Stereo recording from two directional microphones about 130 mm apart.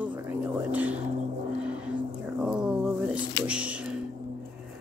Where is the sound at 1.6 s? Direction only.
10° right (ahead or behind).